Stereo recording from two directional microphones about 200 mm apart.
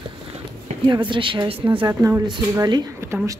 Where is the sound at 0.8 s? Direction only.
25° right (ahead or behind).